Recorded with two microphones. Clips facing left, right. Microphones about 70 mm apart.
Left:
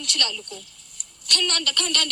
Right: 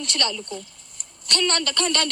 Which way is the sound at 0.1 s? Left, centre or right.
Right.